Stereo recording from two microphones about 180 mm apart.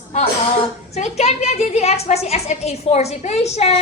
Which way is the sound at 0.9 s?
35° left (ahead or behind).